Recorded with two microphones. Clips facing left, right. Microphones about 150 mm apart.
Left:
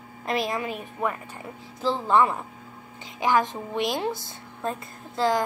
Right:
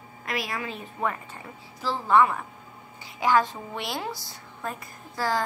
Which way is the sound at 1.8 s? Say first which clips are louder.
Even; 25° left (ahead or behind).